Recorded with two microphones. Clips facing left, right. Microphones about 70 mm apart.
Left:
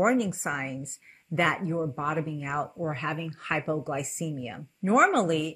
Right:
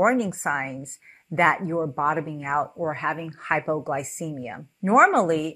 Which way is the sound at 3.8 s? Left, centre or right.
Right.